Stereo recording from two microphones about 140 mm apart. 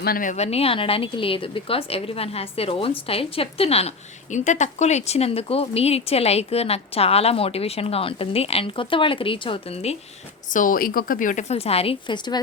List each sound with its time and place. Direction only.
0.0 s a woman's voice: 80° left
0.3 s a woman's voice: 50° left (ahead or behind)
10.5 s a woman's voice: 75° left (ahead or behind); by 12.4 s 30° left (ahead or behind)